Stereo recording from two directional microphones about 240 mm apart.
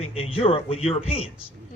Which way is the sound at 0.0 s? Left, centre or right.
Left.